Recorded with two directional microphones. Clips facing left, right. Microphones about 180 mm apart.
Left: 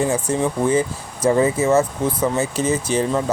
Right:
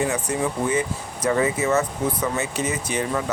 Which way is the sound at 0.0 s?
30° left (ahead or behind).